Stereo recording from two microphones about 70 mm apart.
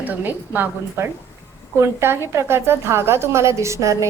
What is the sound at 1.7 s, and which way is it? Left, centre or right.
A woman's voice, right.